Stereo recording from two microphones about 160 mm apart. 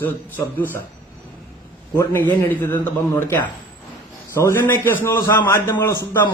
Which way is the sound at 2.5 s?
15° left (ahead or behind).